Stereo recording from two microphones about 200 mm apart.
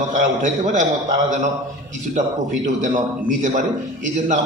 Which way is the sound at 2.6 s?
35° right (ahead or behind).